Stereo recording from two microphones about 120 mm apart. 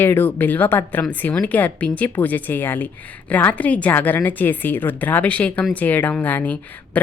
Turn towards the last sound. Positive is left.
turn(degrees=15)  # may be behind; listen again after turning